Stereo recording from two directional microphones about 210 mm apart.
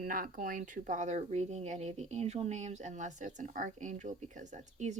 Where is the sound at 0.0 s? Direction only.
40° right (ahead or behind).